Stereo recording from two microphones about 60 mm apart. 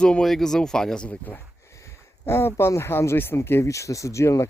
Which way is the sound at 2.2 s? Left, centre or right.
Left.